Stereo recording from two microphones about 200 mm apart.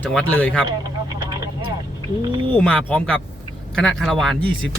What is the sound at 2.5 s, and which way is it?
Speech, 5° left (ahead or behind).